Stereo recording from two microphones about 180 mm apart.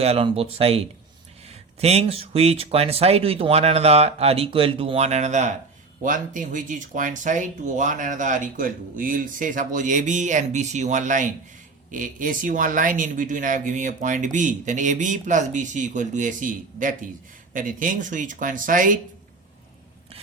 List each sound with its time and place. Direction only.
0.0 s speech: 35° right (ahead or behind)